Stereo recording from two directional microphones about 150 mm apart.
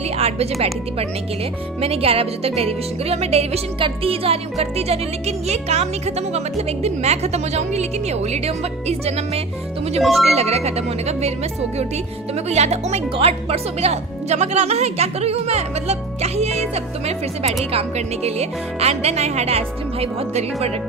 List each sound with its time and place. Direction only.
0.2 s music: 45° right (ahead or behind)
1.8 s speech: 40° right (ahead or behind)
10.0 s speech: centre (ahead or behind)
10.3 s speech: 45° right (ahead or behind)
12.5 s speech: 45° right (ahead or behind)